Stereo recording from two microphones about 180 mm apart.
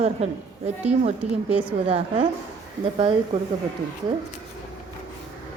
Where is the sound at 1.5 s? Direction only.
10° right (ahead or behind).